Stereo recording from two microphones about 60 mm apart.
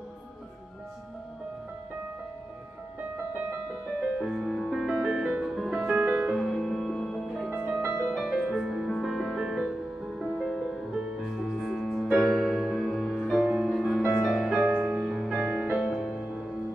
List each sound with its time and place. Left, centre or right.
4.2 s music: centre
5.8 s music: right
6.3 s music: centre
7.4 s music: centre
7.9 s music: centre
8.3 s music: centre
11.4 s music: centre
12.2 s music: centre
12.7 s music: centre
13.3 s music: centre